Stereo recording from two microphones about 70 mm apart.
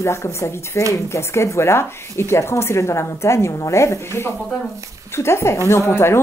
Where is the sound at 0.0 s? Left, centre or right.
Left.